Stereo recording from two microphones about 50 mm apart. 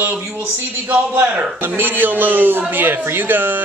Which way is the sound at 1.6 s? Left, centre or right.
Right.